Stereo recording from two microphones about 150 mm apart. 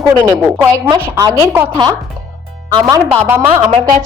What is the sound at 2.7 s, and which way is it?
Speech, 30° right (ahead or behind).